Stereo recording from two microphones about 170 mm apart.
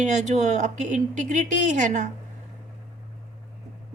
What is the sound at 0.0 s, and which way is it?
Speech, 45° right (ahead or behind).